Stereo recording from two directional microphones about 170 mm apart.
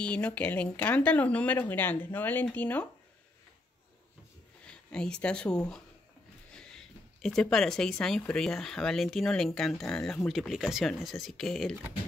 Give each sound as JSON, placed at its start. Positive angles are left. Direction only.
{"t": 0.0, "sound": "speech", "side_deg": 5}
{"t": 4.6, "sound": "a sound", "side_deg": 5}
{"t": 5.2, "sound": "speech", "side_deg": 5}
{"t": 7.2, "sound": "speech", "side_deg": 5}